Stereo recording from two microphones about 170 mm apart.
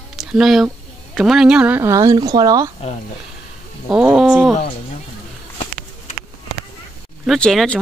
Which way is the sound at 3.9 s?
5° right (ahead or behind).